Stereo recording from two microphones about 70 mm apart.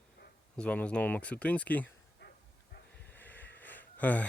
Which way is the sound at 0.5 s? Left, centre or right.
Centre.